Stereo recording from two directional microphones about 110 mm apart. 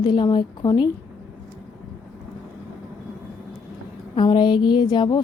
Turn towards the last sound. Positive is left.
turn(degrees=45)  # may be behind; listen again after turning